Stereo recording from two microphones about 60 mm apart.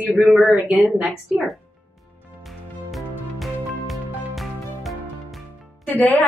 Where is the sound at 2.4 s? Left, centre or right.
Centre.